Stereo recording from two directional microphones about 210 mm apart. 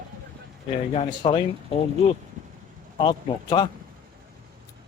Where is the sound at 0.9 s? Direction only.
25° left (ahead or behind).